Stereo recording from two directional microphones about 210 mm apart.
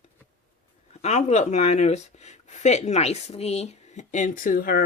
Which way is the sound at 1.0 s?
30° left (ahead or behind).